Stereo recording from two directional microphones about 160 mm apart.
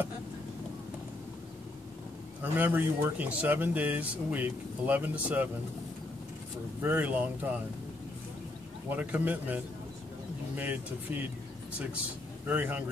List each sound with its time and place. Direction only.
2.4 s speech: 10° right (ahead or behind)
6.8 s speech: 10° right (ahead or behind)
8.9 s speech: 10° right (ahead or behind)
12.4 s speech: 10° right (ahead or behind)